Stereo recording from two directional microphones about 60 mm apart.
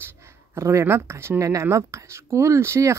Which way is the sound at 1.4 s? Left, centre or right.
Right.